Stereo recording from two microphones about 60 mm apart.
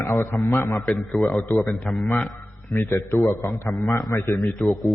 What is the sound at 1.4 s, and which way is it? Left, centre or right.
Speech, left.